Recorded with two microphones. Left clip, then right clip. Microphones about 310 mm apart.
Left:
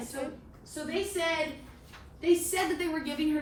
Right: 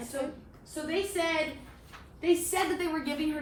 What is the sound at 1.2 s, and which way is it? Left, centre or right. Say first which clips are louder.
Speech: even; right.